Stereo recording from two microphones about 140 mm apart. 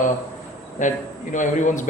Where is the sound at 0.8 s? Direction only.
60° left (ahead or behind).